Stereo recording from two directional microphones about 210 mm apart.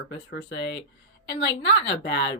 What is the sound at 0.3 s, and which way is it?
Speech, 55° left (ahead or behind).